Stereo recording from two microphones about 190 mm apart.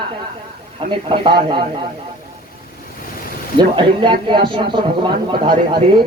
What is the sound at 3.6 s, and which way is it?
Speech, 25° right (ahead or behind).